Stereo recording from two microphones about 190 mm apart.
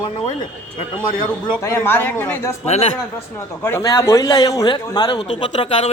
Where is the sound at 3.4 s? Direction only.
15° left (ahead or behind).